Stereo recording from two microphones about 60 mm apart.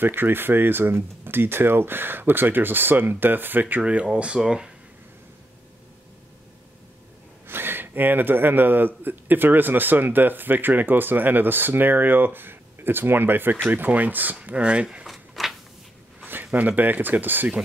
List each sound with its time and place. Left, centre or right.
0.0 s a man's voice: right
3.8 s speech: centre
7.4 s a man's voice: right; by 15.0 s centre
15.0 s a sound: centre
16.5 s a man's voice: right